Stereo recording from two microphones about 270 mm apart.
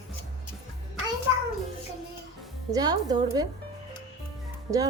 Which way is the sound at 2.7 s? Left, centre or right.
Centre.